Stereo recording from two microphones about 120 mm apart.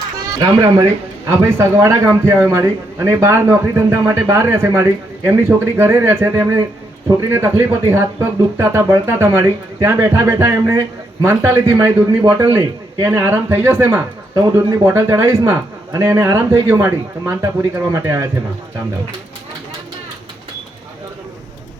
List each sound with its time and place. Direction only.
0.3 s speech: 35° right (ahead or behind)
1.3 s a man's voice: 25° right (ahead or behind)